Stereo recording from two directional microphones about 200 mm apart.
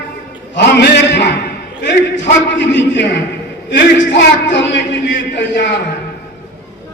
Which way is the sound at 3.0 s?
60° left (ahead or behind).